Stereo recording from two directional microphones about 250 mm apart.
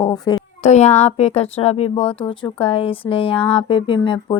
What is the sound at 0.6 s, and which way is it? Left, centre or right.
Speech, left.